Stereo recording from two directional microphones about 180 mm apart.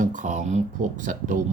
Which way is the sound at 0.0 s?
45° right (ahead or behind).